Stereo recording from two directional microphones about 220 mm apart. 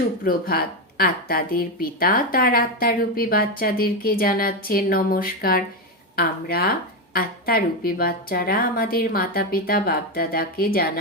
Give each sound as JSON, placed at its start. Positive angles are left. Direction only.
{"t": 0.3, "sound": "a woman's voice", "side_deg": 40}